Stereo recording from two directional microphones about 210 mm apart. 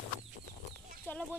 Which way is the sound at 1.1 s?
10° left (ahead or behind).